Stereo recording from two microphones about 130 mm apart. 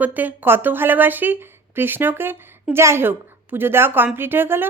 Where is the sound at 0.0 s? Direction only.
15° right (ahead or behind).